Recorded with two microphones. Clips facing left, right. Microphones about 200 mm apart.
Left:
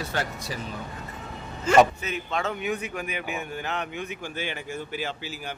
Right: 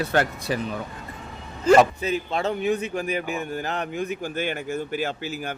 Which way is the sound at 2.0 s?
35° right (ahead or behind).